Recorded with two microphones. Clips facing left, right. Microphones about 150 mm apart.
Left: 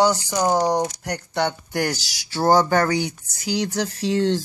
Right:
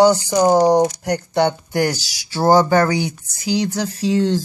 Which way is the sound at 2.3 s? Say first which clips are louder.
Right 4 dB; 5° right (ahead or behind).